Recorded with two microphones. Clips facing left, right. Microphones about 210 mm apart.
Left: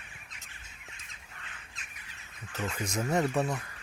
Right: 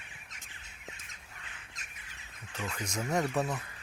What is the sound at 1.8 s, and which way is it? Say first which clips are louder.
Bird: left 1 dB; 40° right (ahead or behind).